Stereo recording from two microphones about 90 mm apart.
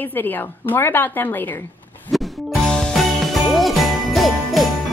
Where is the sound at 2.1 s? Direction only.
5° left (ahead or behind).